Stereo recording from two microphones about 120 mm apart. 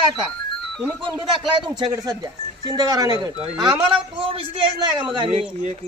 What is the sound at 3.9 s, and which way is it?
Speech, 45° right (ahead or behind).